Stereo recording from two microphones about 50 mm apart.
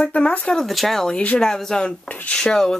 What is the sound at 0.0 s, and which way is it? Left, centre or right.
Speech, left.